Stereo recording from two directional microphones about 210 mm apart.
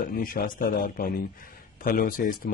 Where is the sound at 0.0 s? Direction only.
40° left (ahead or behind).